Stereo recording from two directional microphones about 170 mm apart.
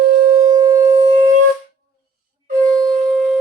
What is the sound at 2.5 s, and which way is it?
Wind instrument, 5° left (ahead or behind).